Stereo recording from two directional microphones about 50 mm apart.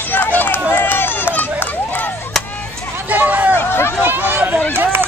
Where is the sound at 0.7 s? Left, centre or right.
Left.